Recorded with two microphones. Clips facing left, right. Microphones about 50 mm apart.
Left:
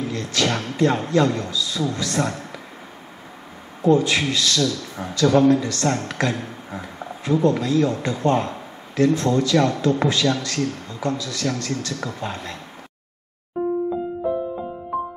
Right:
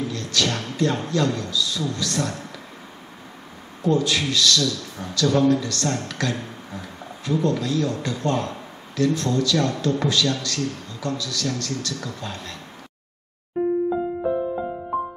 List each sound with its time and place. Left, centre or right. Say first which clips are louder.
0.1 s a man's voice: left 2 dB; left
3.8 s a man's voice: left 4 dB; left